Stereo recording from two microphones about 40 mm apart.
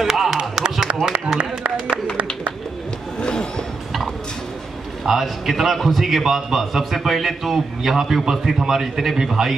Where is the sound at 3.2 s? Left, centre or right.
Left.